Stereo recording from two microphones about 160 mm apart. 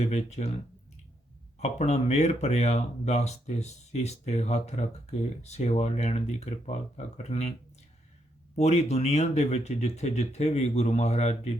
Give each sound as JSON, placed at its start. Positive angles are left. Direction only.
{"t": 0.0, "sound": "speech", "side_deg": 45}
{"t": 1.5, "sound": "speech", "side_deg": 45}
{"t": 8.5, "sound": "speech", "side_deg": 45}